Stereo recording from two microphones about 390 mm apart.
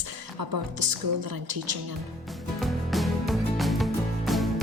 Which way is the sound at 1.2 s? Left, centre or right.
Right.